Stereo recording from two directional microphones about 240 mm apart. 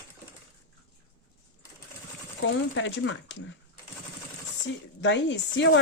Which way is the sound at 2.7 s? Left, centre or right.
Left.